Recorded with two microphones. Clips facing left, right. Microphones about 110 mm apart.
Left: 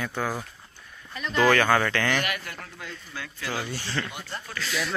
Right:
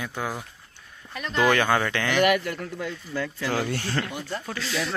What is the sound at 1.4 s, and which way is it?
Speech, 20° right (ahead or behind).